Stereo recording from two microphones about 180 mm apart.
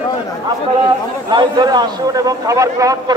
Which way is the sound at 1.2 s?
25° right (ahead or behind).